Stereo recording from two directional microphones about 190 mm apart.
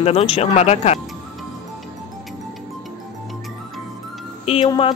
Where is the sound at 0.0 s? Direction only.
30° left (ahead or behind).